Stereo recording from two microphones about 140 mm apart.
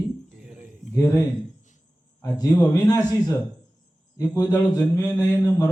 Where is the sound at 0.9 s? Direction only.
20° left (ahead or behind).